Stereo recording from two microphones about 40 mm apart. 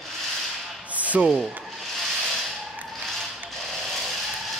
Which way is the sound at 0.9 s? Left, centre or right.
Right.